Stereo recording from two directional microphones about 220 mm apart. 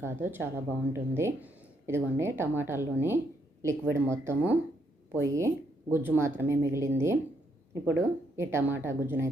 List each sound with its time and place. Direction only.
0.0 s a woman's voice: 10° right (ahead or behind)